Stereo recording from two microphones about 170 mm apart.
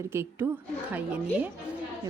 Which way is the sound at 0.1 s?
15° right (ahead or behind).